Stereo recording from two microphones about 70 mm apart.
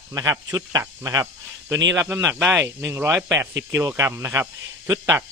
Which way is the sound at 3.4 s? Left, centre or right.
Right.